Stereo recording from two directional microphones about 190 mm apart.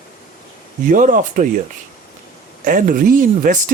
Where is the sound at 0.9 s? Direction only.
45° right (ahead or behind).